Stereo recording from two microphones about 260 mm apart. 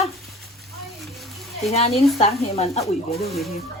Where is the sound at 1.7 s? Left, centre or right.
Left.